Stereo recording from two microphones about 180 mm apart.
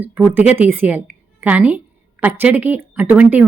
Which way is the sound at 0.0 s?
10° right (ahead or behind).